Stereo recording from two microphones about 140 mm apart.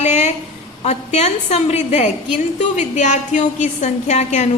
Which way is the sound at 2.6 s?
55° left (ahead or behind).